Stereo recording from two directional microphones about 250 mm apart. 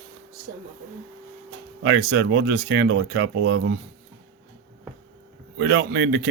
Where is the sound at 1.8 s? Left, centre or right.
Right.